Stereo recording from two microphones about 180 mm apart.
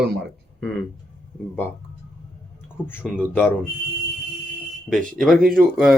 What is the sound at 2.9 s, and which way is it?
Speech, 10° left (ahead or behind).